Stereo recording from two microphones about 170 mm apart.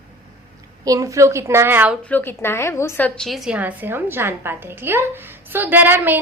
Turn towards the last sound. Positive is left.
turn(degrees=-10)  # may be behind; listen again after turning